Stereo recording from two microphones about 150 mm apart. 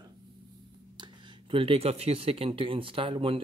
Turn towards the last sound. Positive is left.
turn(degrees=-35)  # may be behind; listen again after turning